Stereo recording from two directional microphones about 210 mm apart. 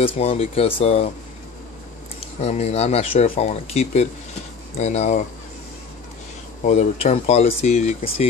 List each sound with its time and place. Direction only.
0.0 s speech: 30° left (ahead or behind)
2.4 s speech: 30° left (ahead or behind)
6.6 s speech: 35° left (ahead or behind)